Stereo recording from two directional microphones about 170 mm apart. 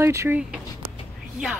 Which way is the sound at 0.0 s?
15° right (ahead or behind).